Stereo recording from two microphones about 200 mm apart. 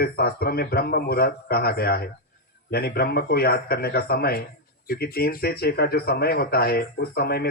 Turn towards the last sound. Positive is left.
turn(degrees=50)  # may be behind; listen again after turning